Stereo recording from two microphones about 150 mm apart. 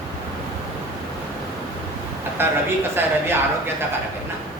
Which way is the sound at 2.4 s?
15° right (ahead or behind).